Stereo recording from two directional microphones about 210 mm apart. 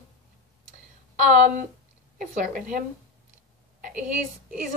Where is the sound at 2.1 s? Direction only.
40° right (ahead or behind).